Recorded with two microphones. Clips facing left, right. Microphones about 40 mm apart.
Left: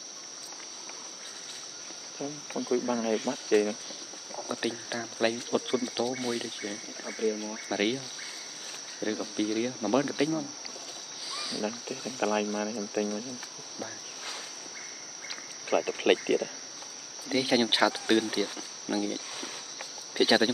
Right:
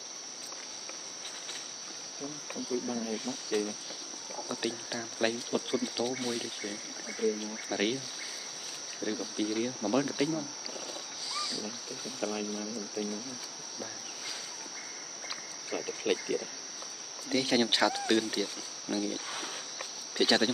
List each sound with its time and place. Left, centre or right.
2.5 s speech: left
4.5 s speech: centre
7.7 s speech: centre
9.0 s speech: centre
11.6 s speech: left
15.9 s speech: left
17.3 s speech: centre